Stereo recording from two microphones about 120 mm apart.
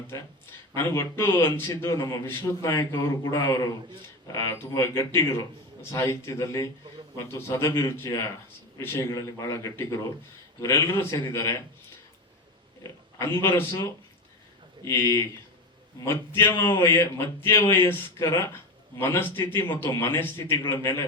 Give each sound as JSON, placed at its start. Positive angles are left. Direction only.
{"t": 0.1, "sound": "speech", "side_deg": 20}
{"t": 13.1, "sound": "speech", "side_deg": 20}
{"t": 14.8, "sound": "speech", "side_deg": 20}